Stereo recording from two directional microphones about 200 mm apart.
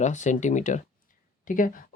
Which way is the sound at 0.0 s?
35° left (ahead or behind).